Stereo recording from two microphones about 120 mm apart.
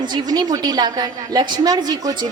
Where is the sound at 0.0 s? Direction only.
35° right (ahead or behind).